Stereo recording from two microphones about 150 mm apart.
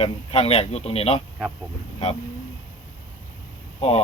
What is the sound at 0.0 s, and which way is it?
Speech, 40° left (ahead or behind).